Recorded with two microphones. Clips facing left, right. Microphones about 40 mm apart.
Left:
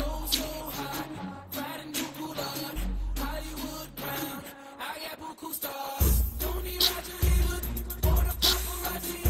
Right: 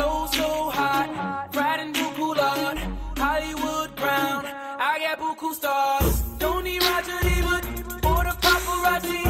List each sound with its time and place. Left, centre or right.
0.0 s music: right